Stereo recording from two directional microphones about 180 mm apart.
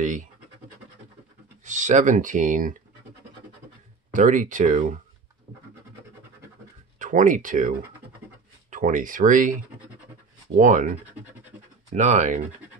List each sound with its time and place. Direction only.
0.0 s scratch: 45° right (ahead or behind)
1.6 s speech: 40° right (ahead or behind)
4.1 s speech: 45° right (ahead or behind)
7.0 s speech: 45° right (ahead or behind)
10.6 s speech: 45° right (ahead or behind)